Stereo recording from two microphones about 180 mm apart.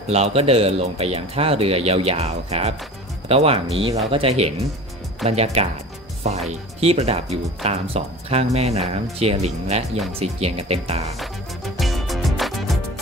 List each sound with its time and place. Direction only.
0.1 s speech: 35° right (ahead or behind)
11.7 s music: centre (ahead or behind)